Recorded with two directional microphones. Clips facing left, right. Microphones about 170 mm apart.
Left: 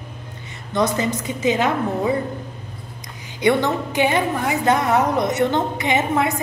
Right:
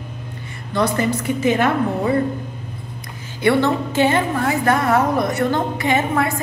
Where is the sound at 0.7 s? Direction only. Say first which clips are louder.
Right 1 dB; 20° left (ahead or behind).